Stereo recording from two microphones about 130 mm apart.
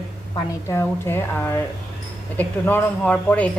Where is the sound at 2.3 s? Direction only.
15° left (ahead or behind).